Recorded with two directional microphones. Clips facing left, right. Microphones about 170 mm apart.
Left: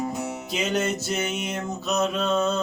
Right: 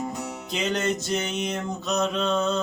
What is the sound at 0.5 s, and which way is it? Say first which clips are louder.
Music: even; 5° left (ahead or behind).